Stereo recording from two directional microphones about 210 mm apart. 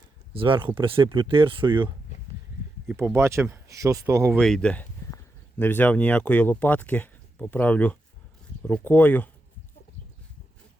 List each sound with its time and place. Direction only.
0.3 s speech: 25° right (ahead or behind)
2.9 s speech: 10° right (ahead or behind)
4.4 s speech: 5° left (ahead or behind)